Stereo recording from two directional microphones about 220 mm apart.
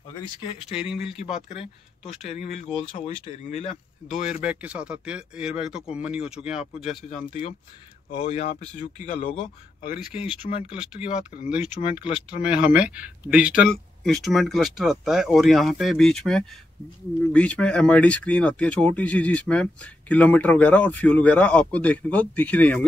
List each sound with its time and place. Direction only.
1.3 s speech: centre (ahead or behind)
2.2 s speech: 30° left (ahead or behind)
4.1 s speech: 5° right (ahead or behind)
7.1 s speech: 30° left (ahead or behind)
10.7 s speech: 5° right (ahead or behind)
11.8 s speech: 25° left (ahead or behind)
12.1 s speech: 5° right (ahead or behind)